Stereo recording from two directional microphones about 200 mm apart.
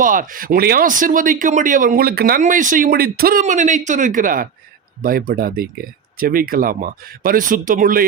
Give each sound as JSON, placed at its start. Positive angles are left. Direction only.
{"t": 0.0, "sound": "speech", "side_deg": -40}